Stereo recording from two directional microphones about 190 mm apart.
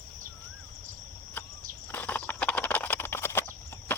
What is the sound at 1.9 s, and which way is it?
Horse, 10° left (ahead or behind).